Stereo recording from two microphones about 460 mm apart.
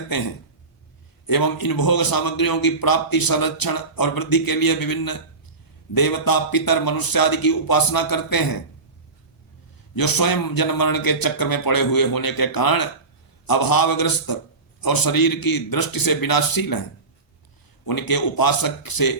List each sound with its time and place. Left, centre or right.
0.1 s a man's voice: left
1.3 s a man's voice: left
9.9 s a man's voice: left
17.8 s a man's voice: left